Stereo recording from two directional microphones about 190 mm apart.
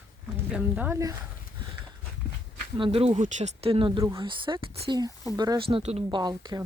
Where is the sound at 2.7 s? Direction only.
30° right (ahead or behind).